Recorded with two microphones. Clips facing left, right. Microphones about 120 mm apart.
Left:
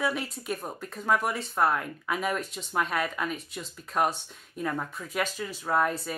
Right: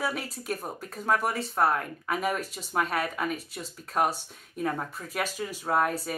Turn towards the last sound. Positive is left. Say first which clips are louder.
# even
turn(degrees=-5)  # may be behind; listen again after turning